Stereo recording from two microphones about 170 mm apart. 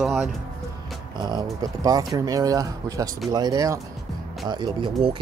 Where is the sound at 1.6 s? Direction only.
20° right (ahead or behind).